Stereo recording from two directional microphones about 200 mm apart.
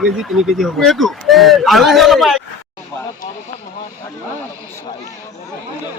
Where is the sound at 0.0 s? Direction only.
Centre (ahead or behind).